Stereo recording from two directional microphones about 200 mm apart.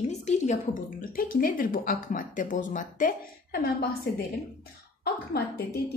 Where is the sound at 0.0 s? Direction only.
35° left (ahead or behind).